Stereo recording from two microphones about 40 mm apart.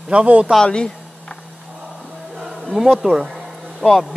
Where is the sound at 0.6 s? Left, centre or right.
Left.